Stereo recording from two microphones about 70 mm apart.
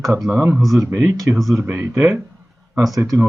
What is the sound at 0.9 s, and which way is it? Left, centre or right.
Speech, right.